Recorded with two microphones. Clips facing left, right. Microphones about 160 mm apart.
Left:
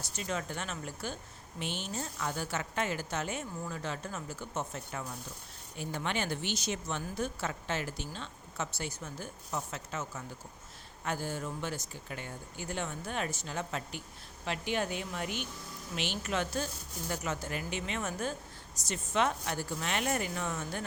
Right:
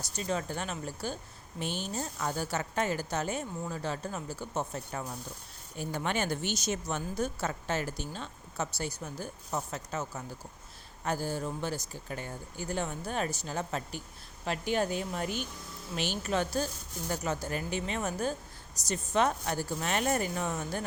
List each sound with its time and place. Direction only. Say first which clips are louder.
0.0 s a woman's voice: right 3 dB; 35° right (ahead or behind)